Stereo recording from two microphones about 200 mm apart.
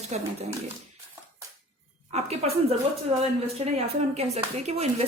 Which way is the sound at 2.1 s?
30° right (ahead or behind).